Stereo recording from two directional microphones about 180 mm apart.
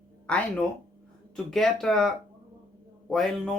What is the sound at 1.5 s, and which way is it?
Speech, centre (ahead or behind).